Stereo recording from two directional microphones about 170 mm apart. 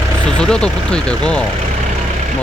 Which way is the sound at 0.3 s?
5° left (ahead or behind).